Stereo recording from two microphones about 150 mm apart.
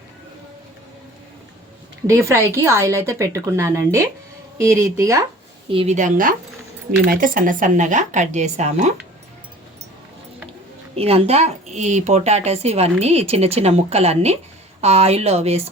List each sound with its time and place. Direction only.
2.0 s speech: 20° right (ahead or behind)
5.7 s speech: 45° right (ahead or behind)
10.9 s speech: 40° right (ahead or behind)